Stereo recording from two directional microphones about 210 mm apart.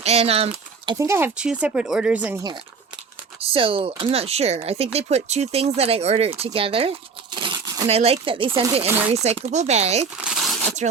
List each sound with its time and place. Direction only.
0.0 s speech: 30° right (ahead or behind)
0.9 s speech: 15° right (ahead or behind)
3.4 s speech: 25° right (ahead or behind)
7.3 s crumpling: 20° right (ahead or behind)
7.9 s speech: 30° right (ahead or behind)
10.2 s crumpling: centre (ahead or behind)